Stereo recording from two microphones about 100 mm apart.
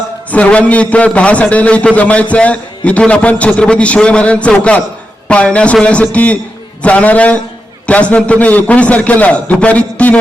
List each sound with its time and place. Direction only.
0.3 s a man's voice: 15° left (ahead or behind)